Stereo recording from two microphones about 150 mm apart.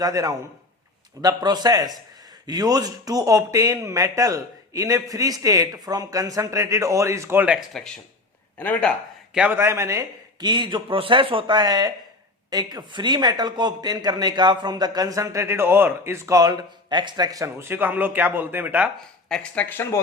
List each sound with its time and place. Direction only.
0.0 s a man's voice: 25° right (ahead or behind)
7.7 s speech: 5° left (ahead or behind)
9.3 s a man's voice: 10° right (ahead or behind)
19.3 s speech: 10° left (ahead or behind)